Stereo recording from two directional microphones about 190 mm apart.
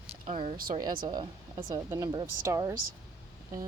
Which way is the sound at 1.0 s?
25° right (ahead or behind).